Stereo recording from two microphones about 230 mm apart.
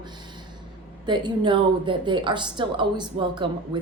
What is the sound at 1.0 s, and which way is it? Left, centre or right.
A woman's voice, centre.